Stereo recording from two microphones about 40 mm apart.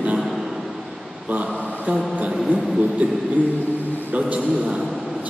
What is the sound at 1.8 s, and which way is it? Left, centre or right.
Speech, right.